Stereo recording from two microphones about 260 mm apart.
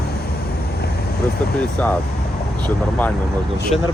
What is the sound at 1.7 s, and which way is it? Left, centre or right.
Speech, centre.